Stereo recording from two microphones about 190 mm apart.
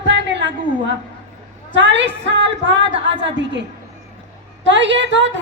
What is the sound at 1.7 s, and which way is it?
A woman's voice, 70° right (ahead or behind).